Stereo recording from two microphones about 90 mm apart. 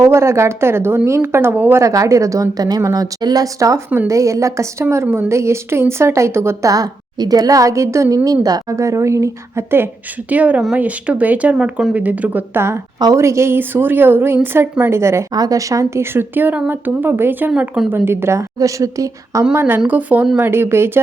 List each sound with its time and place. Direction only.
0.0 s speech: 30° right (ahead or behind)
1.8 s speech: 35° right (ahead or behind); by 12.6 s 20° right (ahead or behind)
13.1 s speech: 30° right (ahead or behind)
15.3 s speech: 45° right (ahead or behind); by 17.5 s 25° right (ahead or behind)
17.5 s speech: 5° right (ahead or behind)
17.8 s speech: 25° right (ahead or behind)
19.5 s speech: 25° right (ahead or behind)